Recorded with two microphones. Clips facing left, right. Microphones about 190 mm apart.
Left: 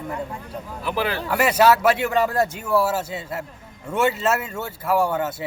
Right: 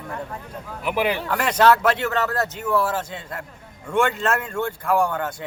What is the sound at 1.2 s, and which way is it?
A man's voice, 5° left (ahead or behind).